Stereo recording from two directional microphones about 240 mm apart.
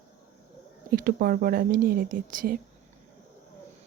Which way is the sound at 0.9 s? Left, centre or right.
Right.